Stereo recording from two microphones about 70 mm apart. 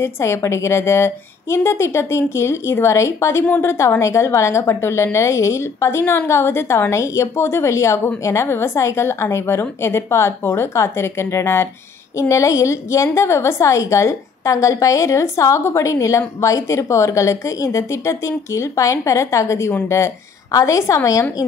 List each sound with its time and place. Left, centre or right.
0.0 s a woman's voice: left
12.2 s a woman's voice: left